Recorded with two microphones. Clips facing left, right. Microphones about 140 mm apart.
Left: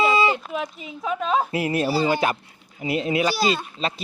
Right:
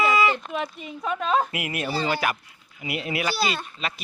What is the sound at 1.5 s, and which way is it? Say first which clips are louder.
Speech: left 6 dB; 30° left (ahead or behind).